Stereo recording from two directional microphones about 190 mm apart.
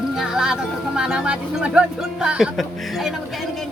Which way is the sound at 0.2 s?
5° right (ahead or behind).